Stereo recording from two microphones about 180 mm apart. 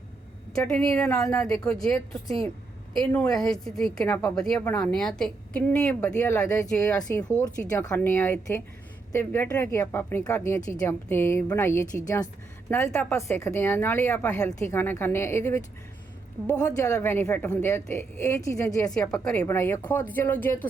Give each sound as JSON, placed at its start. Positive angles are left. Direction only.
{"t": 0.6, "sound": "speech", "side_deg": 5}
{"t": 1.2, "sound": "speech", "side_deg": 20}
{"t": 1.5, "sound": "speech", "side_deg": 5}
{"t": 18.9, "sound": "speech", "side_deg": 5}
{"t": 19.5, "sound": "speech", "side_deg": 15}